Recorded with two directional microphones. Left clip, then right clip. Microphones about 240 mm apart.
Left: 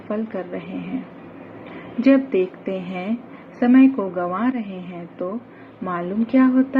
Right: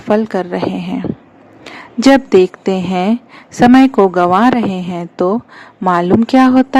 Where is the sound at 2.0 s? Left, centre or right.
Right.